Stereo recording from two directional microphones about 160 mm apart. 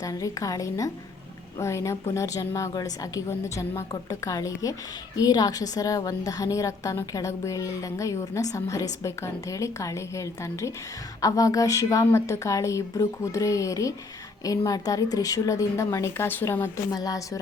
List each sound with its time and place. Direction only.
0.0 s a woman's voice: 20° left (ahead or behind)